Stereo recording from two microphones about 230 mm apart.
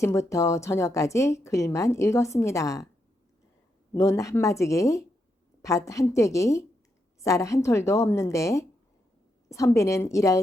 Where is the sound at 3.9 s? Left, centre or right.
Centre.